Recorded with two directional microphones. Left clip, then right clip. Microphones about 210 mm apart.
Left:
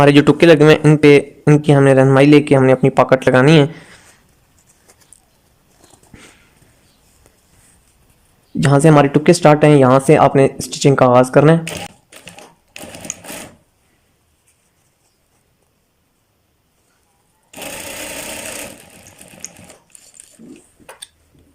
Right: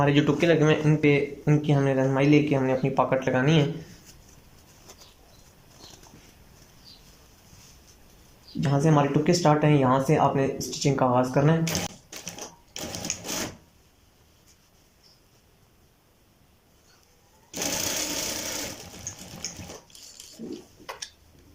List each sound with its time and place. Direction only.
0.0 s speech: 50° left (ahead or behind)
8.6 s speech: 50° left (ahead or behind)